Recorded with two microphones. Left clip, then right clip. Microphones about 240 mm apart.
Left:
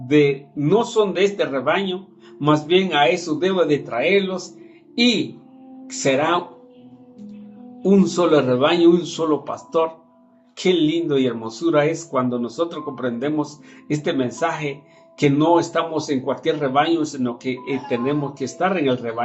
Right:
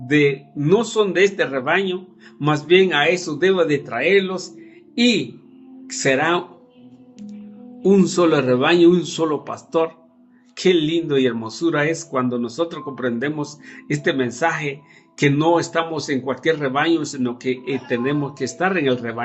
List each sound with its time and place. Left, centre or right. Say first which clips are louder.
0.1 s a man's voice: left 1 dB; right
7.9 s speech: right 1 dB; right